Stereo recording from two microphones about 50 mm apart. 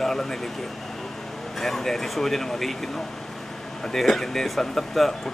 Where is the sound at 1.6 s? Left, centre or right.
Centre.